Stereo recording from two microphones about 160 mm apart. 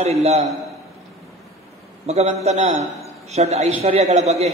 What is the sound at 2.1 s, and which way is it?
A man's voice, 40° right (ahead or behind).